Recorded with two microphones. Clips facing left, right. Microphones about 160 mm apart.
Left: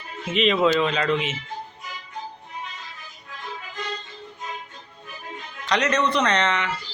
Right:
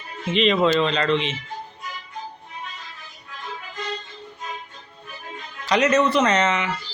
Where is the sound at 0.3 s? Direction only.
5° left (ahead or behind).